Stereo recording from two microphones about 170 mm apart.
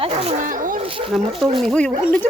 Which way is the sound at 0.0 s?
35° right (ahead or behind).